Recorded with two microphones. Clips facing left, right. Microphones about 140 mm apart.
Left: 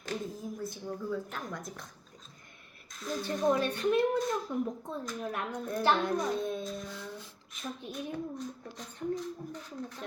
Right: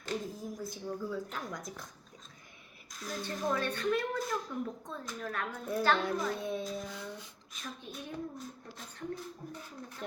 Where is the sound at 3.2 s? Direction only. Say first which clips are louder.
Left 5 dB; 20° left (ahead or behind).